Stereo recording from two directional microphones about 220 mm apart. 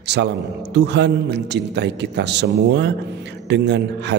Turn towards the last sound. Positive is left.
turn(degrees=-50)  # may be behind; listen again after turning